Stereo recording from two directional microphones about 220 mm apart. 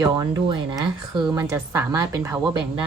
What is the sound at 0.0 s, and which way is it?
Speech, 20° right (ahead or behind).